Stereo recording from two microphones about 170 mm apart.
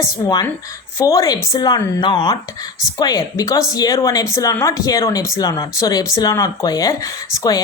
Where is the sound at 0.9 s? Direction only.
20° left (ahead or behind).